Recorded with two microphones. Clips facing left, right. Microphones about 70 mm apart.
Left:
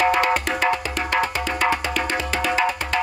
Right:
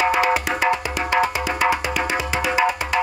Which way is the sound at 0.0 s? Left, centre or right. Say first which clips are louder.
Even; centre.